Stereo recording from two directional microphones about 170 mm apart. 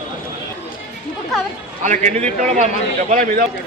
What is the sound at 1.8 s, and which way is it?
Speech, 45° right (ahead or behind).